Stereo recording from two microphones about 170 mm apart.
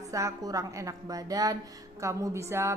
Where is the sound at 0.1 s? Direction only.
20° right (ahead or behind).